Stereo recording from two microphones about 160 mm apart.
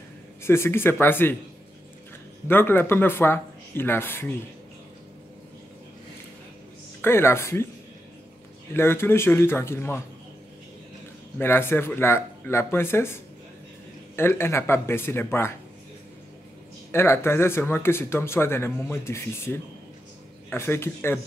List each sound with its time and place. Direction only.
0.4 s speech: 15° left (ahead or behind)
2.4 s speech: 15° left (ahead or behind)
7.0 s speech: 15° left (ahead or behind)
8.7 s speech: 15° left (ahead or behind)
11.3 s speech: 15° left (ahead or behind)
16.9 s speech: 15° left (ahead or behind)